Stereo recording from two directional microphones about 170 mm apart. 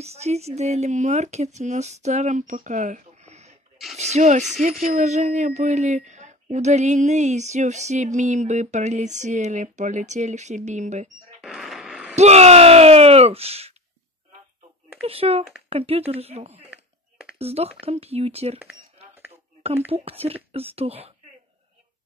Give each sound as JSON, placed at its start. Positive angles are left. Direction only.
{"t": 0.0, "sound": "a woman's voice", "side_deg": -40}
{"t": 11.4, "sound": "music", "side_deg": 0}
{"t": 12.2, "sound": "speech", "side_deg": -40}
{"t": 15.0, "sound": "speech", "side_deg": -35}
{"t": 19.9, "sound": "speech", "side_deg": -35}